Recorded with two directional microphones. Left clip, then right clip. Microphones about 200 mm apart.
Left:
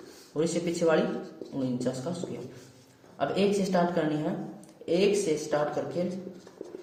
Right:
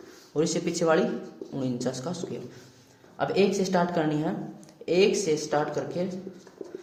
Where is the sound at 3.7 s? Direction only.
50° right (ahead or behind).